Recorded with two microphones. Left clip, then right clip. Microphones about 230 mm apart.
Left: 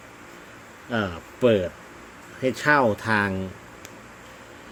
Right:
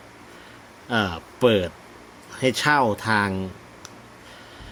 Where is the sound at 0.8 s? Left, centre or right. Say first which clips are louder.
Right 3 dB; centre.